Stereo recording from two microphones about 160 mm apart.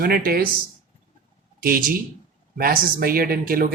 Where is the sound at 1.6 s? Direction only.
65° right (ahead or behind).